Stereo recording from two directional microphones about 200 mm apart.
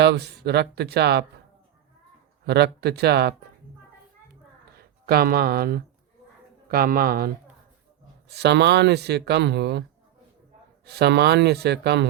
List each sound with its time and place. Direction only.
0.0 s speech: 55° right (ahead or behind)
2.5 s speech: 55° right (ahead or behind)
5.0 s speech: 50° right (ahead or behind)
8.3 s speech: 55° right (ahead or behind)
10.8 s speech: 55° right (ahead or behind)